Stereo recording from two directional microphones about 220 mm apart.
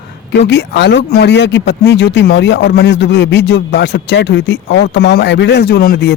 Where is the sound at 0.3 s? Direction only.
50° left (ahead or behind).